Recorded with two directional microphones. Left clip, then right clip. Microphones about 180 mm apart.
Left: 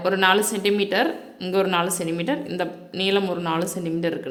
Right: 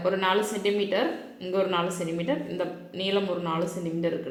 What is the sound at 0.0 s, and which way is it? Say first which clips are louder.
Speech: left 6 dB; 40° left (ahead or behind).